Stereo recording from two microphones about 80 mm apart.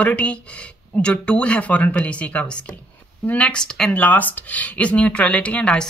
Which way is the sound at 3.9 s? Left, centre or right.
Left.